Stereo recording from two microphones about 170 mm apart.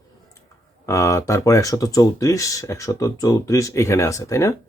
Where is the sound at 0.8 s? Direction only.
20° left (ahead or behind).